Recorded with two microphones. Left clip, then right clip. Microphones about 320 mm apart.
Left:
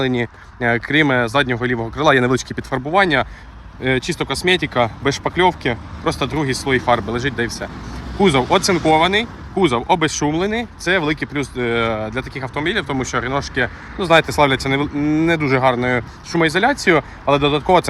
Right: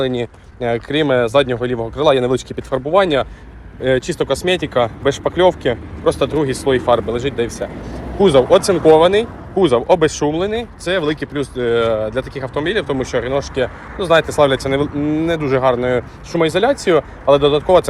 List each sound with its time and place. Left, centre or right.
0.0 s speech: centre